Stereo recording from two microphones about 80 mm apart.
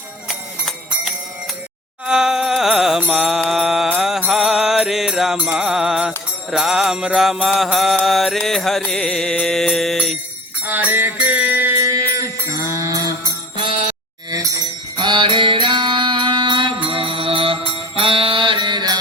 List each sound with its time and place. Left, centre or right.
0.3 s clip-clop: centre
2.0 s music: centre
3.5 s mantra: centre
7.4 s music: centre
10.7 s mantra: right
11.8 s music: right
14.9 s music: right